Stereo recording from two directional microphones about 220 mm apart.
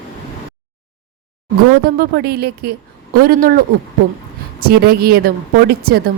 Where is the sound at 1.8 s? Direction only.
45° right (ahead or behind).